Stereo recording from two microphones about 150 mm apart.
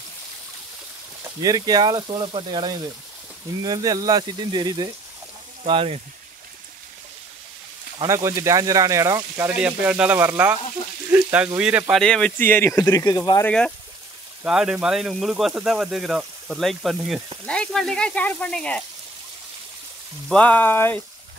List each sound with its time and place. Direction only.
1.4 s speech: 25° right (ahead or behind)
8.1 s speech: 20° right (ahead or behind)
9.6 s speech: 10° right (ahead or behind)
11.9 s speech: 5° left (ahead or behind); by 13.5 s 25° left (ahead or behind)
13.5 s speech: 5° left (ahead or behind)
14.4 s speech: 5° right (ahead or behind)
20.2 s speech: 10° left (ahead or behind)